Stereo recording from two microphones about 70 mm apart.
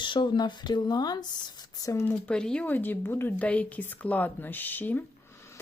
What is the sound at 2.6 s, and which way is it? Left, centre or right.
Speech, left.